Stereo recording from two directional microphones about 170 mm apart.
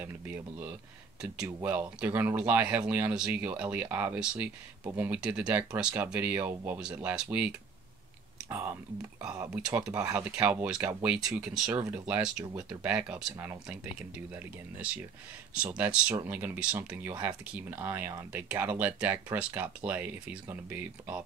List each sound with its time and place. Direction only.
0.0 s speech: 10° right (ahead or behind)
9.9 s speech: 20° right (ahead or behind)
10.3 s speech: 10° right (ahead or behind)
15.5 s speech: 5° right (ahead or behind)